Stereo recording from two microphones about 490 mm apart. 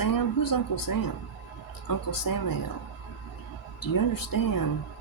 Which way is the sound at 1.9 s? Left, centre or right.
Left.